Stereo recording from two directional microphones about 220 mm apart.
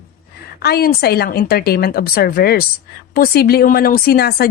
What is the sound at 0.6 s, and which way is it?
A woman's voice, 45° left (ahead or behind).